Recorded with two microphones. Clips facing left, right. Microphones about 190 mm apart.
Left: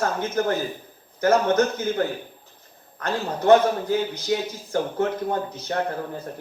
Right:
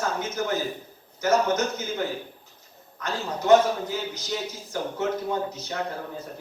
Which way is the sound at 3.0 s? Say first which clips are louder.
Left 4 dB; 55° left (ahead or behind).